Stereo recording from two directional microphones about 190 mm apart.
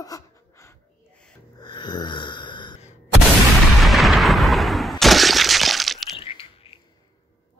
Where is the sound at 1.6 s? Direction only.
25° left (ahead or behind).